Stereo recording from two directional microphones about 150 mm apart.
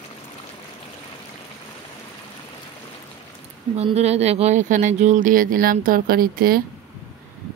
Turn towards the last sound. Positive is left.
turn(degrees=-80)